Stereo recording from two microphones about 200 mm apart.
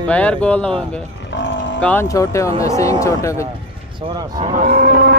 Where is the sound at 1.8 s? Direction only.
10° left (ahead or behind).